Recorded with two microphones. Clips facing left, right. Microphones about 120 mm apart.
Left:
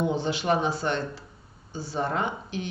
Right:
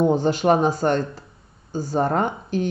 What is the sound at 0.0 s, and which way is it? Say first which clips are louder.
Speech: right 8 dB; 45° right (ahead or behind).